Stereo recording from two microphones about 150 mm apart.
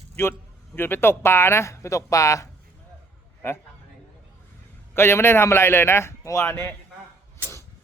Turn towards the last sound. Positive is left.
turn(degrees=15)  # may be behind; listen again after turning